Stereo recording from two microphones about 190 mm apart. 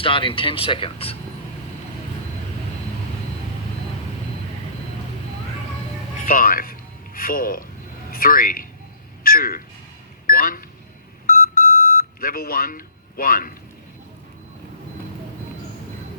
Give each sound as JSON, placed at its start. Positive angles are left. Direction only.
{"t": 0.0, "sound": "speech", "side_deg": 25}
{"t": 6.1, "sound": "music", "side_deg": 45}
{"t": 8.1, "sound": "speech", "side_deg": 50}
{"t": 11.3, "sound": "beep", "side_deg": 50}